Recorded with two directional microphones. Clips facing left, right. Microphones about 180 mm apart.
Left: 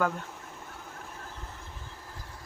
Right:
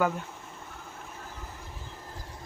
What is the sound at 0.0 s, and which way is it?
Speech, 5° right (ahead or behind).